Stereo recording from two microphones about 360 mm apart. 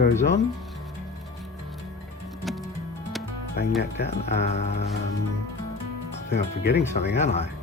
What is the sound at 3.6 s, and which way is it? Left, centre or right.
Speech, left.